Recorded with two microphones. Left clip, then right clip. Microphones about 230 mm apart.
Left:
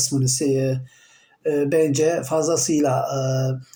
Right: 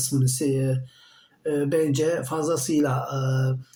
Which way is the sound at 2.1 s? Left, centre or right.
Centre.